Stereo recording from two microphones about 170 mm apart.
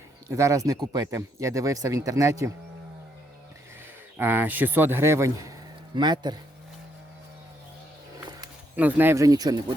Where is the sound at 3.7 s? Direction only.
15° right (ahead or behind).